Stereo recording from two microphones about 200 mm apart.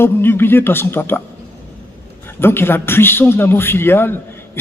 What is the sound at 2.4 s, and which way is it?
A man's voice, 10° left (ahead or behind).